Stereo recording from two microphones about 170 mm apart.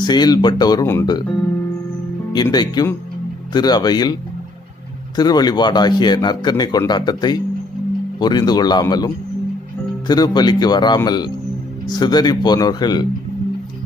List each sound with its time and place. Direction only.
0.0 s a man's voice: 25° left (ahead or behind)
2.3 s a man's voice: 25° left (ahead or behind)